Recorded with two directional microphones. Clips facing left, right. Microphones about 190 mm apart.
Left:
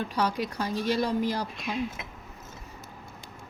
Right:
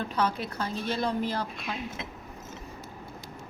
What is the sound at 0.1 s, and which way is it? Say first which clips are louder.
A woman's voice: left 1 dB; 10° left (ahead or behind).